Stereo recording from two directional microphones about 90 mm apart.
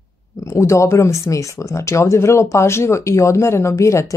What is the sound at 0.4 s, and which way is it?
Speech, 35° left (ahead or behind).